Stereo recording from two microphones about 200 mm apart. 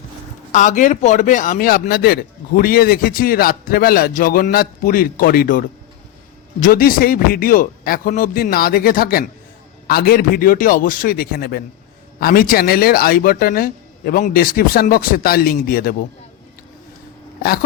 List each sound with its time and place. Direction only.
0.5 s speech: 40° left (ahead or behind)